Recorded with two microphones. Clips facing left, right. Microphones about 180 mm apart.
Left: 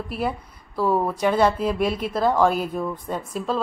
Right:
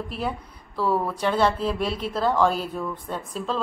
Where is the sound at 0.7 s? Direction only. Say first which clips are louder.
Left 3 dB; 15° left (ahead or behind).